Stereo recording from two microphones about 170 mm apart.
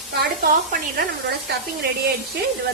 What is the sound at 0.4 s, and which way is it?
Speech, 55° right (ahead or behind).